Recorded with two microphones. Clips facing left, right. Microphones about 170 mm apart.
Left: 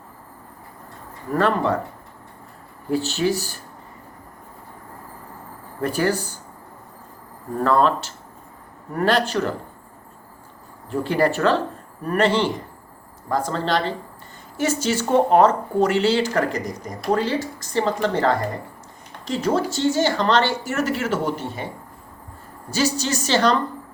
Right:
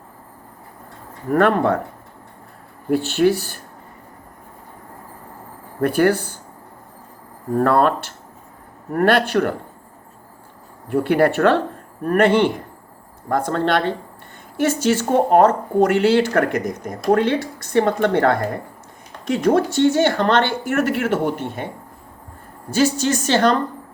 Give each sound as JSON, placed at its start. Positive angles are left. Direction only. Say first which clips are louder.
{"t": 1.3, "sound": "speech", "louder": "right 4 dB", "side_deg": -60}
{"t": 2.9, "sound": "speech", "louder": "right 5 dB", "side_deg": -55}
{"t": 5.8, "sound": "speech", "louder": "right 5 dB", "side_deg": -60}
{"t": 7.5, "sound": "speech", "louder": "right 2 dB", "side_deg": -60}
{"t": 10.9, "sound": "speech", "louder": "right 4 dB", "side_deg": -60}
{"t": 22.7, "sound": "a woman's voice", "louder": "right 4 dB", "side_deg": -50}